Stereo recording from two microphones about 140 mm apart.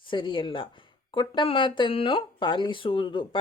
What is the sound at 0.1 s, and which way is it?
Speech, 35° left (ahead or behind).